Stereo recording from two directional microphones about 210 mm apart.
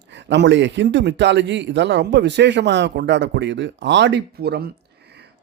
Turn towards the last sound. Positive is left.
turn(degrees=-50)  # may be behind; listen again after turning